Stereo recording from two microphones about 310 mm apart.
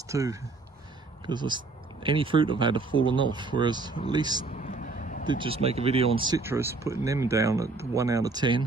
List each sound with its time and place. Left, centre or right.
0.1 s speech: centre
4.5 s a sound: left
5.2 s speech: centre